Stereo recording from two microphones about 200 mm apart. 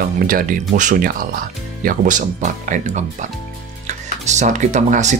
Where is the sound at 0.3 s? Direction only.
45° right (ahead or behind).